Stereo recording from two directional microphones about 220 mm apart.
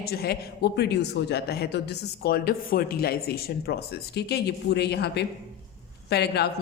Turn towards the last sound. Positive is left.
turn(degrees=50)  # may be behind; listen again after turning